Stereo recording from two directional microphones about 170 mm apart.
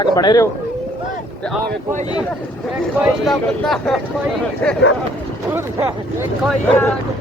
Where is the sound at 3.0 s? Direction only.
Centre (ahead or behind).